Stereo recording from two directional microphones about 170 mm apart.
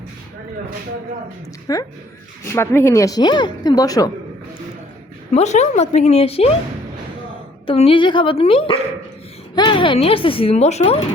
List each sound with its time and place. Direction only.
1.7 s speech: 20° left (ahead or behind)
5.3 s a woman's voice: 40° left (ahead or behind)
7.7 s a woman's voice: 35° left (ahead or behind)